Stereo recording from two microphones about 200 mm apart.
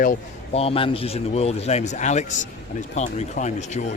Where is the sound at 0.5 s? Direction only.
30° left (ahead or behind).